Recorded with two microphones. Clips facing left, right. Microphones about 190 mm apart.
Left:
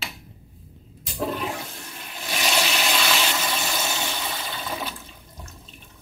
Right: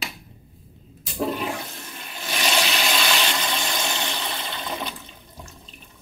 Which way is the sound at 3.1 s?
5° left (ahead or behind).